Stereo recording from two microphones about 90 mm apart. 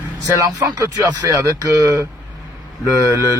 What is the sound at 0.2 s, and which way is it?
Speech, 40° right (ahead or behind).